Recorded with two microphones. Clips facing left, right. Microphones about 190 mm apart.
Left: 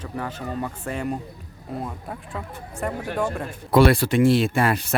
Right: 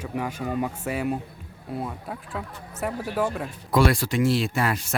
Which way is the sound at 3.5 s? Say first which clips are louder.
Left 7 dB; 60° left (ahead or behind).